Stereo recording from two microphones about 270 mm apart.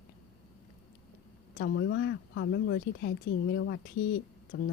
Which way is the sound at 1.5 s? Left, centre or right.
Left.